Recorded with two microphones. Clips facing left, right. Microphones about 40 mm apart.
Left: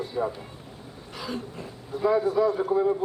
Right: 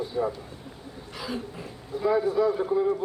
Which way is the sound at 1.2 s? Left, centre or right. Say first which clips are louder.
Even; centre.